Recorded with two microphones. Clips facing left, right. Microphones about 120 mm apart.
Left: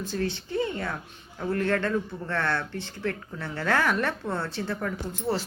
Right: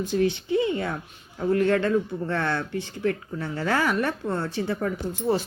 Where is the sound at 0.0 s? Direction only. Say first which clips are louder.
Right 6 dB; 15° right (ahead or behind).